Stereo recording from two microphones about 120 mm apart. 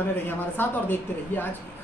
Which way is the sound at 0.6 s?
15° left (ahead or behind).